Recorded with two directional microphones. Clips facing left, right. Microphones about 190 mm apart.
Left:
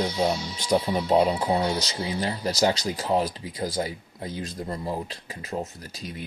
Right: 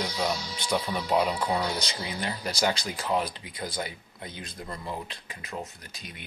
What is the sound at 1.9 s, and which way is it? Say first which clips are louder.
Speech: left 5 dB; 30° left (ahead or behind).